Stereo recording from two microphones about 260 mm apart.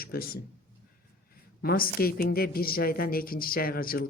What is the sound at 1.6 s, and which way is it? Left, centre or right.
Speech, left.